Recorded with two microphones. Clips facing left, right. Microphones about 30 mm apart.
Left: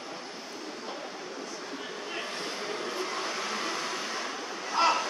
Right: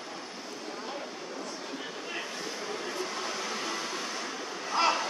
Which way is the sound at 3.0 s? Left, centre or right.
Centre.